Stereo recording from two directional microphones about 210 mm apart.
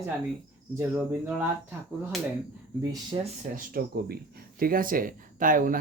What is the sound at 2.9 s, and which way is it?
Speech, 20° right (ahead or behind).